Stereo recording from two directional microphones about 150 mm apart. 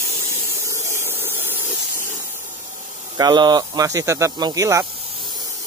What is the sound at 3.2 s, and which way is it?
Speech, 30° right (ahead or behind).